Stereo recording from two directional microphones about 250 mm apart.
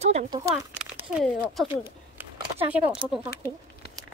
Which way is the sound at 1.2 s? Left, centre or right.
Centre.